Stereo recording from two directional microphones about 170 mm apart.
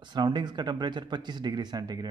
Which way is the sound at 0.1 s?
25° right (ahead or behind).